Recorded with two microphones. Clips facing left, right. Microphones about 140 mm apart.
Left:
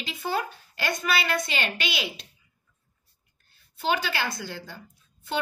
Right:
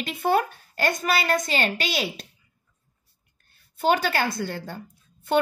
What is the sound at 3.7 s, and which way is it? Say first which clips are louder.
A woman's voice: right 5 dB; 50° right (ahead or behind).